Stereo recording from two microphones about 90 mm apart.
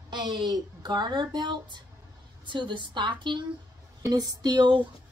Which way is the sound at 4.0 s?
50° right (ahead or behind).